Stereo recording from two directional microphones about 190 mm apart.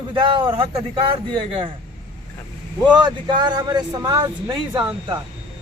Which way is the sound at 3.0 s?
25° right (ahead or behind).